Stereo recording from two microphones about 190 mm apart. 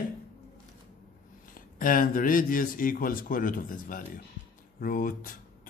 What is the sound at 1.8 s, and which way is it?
Speech, 45° left (ahead or behind).